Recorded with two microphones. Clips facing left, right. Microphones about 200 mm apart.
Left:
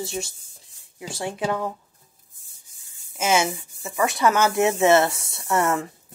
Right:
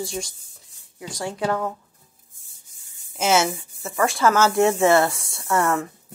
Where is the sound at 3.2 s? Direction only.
10° left (ahead or behind).